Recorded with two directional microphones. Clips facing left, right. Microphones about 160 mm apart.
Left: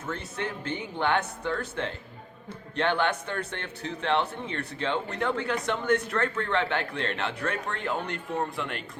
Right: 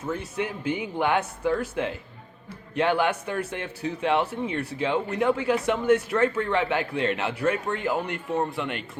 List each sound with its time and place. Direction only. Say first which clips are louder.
0.0 s speech: right 4 dB; 10° right (ahead or behind)